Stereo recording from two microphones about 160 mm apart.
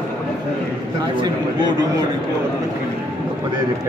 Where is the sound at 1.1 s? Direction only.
25° right (ahead or behind).